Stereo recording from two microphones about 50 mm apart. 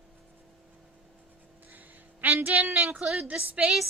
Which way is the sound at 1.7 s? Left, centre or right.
Right.